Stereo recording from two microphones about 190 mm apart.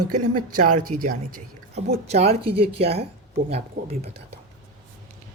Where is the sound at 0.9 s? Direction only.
35° right (ahead or behind).